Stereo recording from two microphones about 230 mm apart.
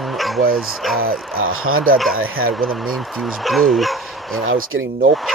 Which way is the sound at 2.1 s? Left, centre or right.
Right.